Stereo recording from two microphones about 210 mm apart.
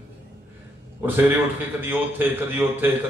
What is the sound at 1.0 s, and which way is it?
A man's voice, 10° right (ahead or behind).